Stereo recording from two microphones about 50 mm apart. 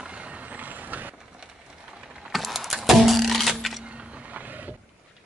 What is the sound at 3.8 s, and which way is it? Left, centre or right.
Vehicle, right.